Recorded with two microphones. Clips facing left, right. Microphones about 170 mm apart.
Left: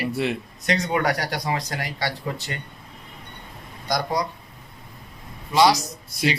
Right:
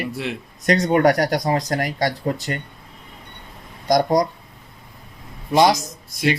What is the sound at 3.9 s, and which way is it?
Speech, 40° right (ahead or behind).